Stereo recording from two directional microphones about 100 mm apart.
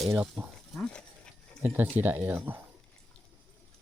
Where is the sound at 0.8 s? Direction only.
10° left (ahead or behind).